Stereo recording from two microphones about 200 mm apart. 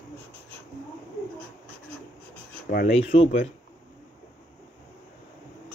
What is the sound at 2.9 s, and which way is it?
Speech, 30° left (ahead or behind).